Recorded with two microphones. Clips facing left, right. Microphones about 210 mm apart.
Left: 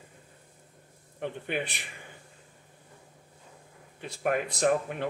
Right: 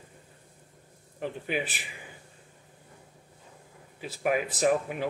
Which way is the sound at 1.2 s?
5° right (ahead or behind).